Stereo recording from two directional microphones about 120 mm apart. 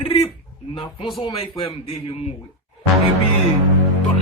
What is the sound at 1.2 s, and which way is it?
Speech, 50° left (ahead or behind).